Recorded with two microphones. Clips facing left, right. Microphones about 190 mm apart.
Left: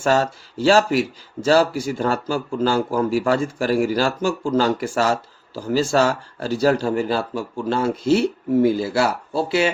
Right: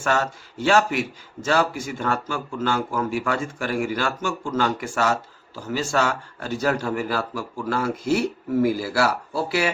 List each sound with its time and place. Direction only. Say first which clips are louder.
0.0 s a man's voice: left 5 dB; 30° left (ahead or behind)